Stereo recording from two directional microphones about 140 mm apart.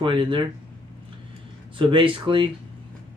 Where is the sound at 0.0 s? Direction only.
35° right (ahead or behind).